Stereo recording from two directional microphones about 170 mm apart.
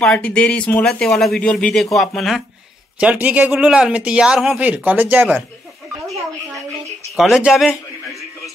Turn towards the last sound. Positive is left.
turn(degrees=-5)  # may be behind; listen again after turning